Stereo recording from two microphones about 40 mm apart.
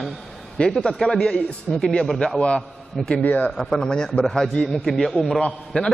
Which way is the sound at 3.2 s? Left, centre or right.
Left.